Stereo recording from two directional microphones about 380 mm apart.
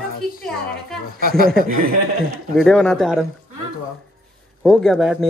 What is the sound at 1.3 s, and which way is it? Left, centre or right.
Speech, right.